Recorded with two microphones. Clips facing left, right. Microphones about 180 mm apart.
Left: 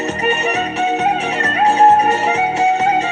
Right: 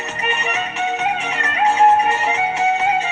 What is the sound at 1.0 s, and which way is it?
Music, 35° left (ahead or behind).